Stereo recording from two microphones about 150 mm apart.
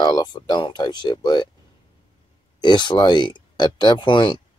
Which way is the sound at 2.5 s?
30° left (ahead or behind).